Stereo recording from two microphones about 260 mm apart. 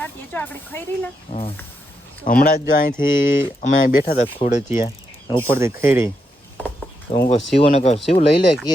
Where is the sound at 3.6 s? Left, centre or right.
Left.